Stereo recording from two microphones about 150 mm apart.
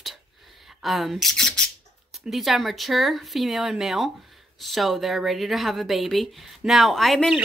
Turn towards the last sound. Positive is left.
turn(degrees=-5)  # may be behind; listen again after turning